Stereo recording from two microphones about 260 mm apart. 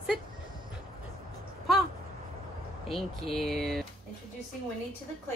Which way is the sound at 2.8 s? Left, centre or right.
Centre.